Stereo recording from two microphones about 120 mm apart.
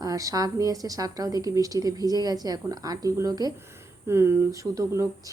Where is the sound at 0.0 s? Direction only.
30° right (ahead or behind).